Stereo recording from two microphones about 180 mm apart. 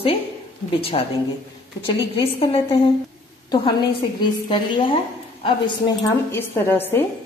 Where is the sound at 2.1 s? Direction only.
30° left (ahead or behind).